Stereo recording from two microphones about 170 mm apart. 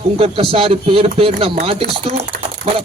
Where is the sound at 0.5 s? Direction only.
35° right (ahead or behind).